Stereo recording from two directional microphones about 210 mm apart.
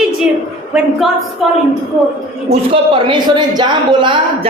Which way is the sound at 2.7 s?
25° right (ahead or behind).